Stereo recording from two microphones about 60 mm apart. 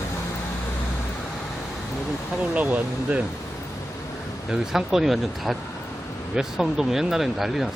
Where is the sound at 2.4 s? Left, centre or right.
Right.